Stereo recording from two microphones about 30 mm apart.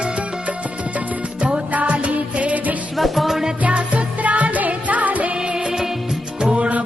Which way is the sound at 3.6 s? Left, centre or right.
Right.